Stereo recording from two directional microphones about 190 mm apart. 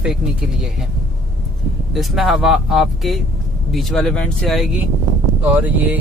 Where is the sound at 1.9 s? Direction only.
Centre (ahead or behind).